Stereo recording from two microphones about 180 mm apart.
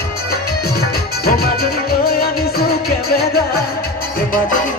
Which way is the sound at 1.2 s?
60° left (ahead or behind).